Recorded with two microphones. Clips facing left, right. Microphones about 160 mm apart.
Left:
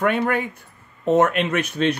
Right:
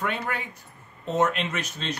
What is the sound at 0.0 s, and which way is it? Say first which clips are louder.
Speech: left 9 dB; 55° left (ahead or behind).